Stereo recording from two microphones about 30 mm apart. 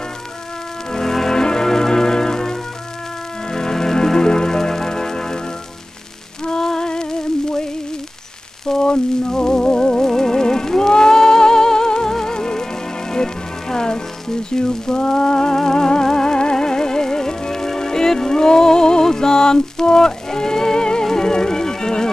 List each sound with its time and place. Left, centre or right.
0.9 s music: centre
6.4 s music: centre
8.6 s frying: left
8.9 s music: left
10.0 s music: centre